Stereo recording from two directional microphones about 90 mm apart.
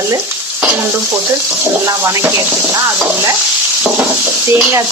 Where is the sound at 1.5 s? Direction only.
25° right (ahead or behind).